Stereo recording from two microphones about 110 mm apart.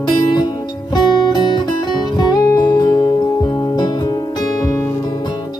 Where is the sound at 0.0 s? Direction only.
40° left (ahead or behind).